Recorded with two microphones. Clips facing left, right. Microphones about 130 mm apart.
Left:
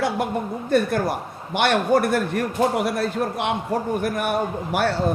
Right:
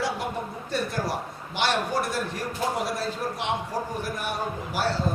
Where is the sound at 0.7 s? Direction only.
55° left (ahead or behind).